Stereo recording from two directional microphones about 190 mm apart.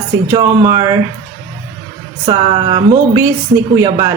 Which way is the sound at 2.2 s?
25° right (ahead or behind).